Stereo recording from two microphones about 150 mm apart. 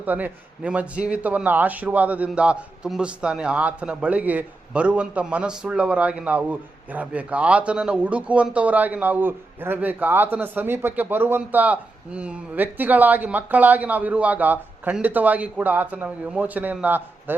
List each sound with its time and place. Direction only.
0.0 s a man's voice: 10° right (ahead or behind)